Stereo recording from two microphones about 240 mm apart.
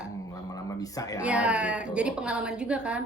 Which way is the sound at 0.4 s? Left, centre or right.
Centre.